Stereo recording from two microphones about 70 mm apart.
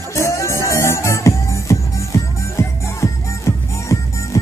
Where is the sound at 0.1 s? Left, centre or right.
Left.